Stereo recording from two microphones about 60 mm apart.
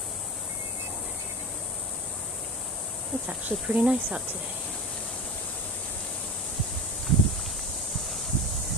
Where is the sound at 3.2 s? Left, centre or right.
Centre.